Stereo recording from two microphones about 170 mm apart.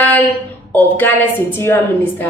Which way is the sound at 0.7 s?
10° left (ahead or behind).